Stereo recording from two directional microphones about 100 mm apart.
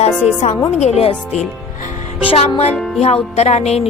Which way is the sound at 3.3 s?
90° left.